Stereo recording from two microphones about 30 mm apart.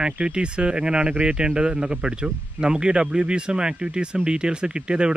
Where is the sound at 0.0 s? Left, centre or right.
Right.